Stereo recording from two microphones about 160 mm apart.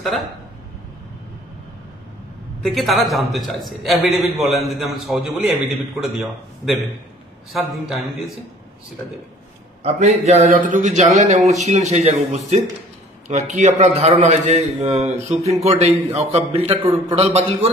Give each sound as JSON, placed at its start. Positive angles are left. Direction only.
{"t": 0.0, "sound": "a man's voice", "side_deg": 0}
{"t": 2.6, "sound": "a man's voice", "side_deg": 0}
{"t": 9.8, "sound": "a man's voice", "side_deg": -45}